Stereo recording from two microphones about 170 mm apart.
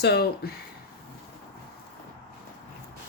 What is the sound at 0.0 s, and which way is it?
Speech, 75° left (ahead or behind).